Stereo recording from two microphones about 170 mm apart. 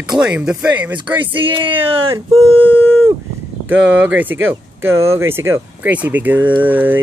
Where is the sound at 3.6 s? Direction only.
10° right (ahead or behind).